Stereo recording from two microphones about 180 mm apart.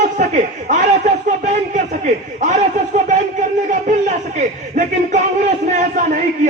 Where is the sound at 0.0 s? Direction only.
45° right (ahead or behind).